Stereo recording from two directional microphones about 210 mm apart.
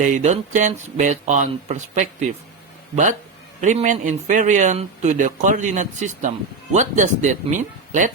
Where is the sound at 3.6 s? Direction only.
35° right (ahead or behind).